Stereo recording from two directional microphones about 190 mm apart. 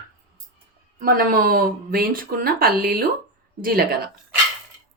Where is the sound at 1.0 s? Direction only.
50° right (ahead or behind).